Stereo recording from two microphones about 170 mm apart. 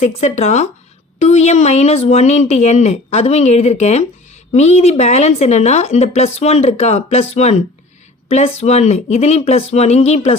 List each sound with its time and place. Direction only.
0.0 s a woman's voice: 40° left (ahead or behind)